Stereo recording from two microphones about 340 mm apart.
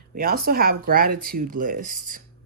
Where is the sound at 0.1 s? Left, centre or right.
Right.